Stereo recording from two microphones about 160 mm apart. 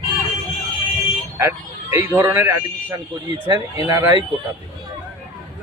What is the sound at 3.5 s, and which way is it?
Speech, 25° right (ahead or behind).